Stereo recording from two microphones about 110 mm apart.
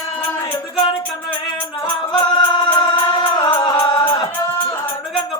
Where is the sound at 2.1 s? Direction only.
45° left (ahead or behind).